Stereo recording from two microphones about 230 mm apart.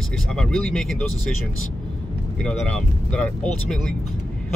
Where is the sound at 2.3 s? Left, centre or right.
Centre.